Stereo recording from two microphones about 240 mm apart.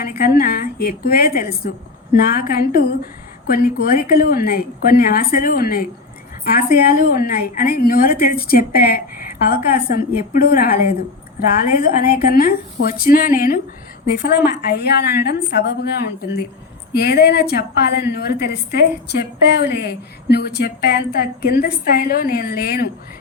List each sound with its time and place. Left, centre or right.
0.0 s a woman's voice: left